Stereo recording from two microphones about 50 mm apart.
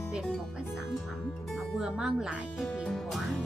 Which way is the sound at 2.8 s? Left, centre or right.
Centre.